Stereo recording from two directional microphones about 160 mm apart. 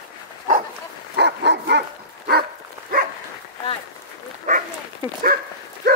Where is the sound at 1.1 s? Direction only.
90° right.